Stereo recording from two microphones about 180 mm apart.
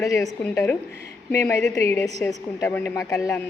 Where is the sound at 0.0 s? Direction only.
15° left (ahead or behind).